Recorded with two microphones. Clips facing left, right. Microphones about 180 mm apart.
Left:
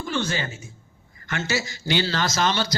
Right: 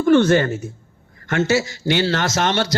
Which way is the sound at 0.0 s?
60° right (ahead or behind).